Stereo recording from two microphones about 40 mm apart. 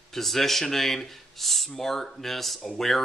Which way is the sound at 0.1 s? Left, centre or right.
Centre.